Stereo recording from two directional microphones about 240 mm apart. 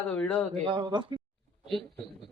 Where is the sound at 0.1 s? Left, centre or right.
Centre.